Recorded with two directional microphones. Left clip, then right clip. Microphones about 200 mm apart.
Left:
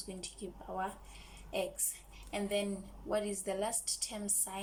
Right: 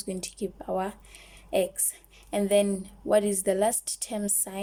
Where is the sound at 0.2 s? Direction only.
45° right (ahead or behind).